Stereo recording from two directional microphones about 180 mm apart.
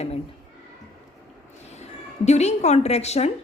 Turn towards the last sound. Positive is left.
turn(degrees=35)  # may be behind; listen again after turning